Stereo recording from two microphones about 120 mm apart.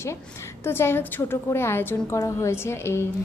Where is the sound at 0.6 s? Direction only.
20° left (ahead or behind).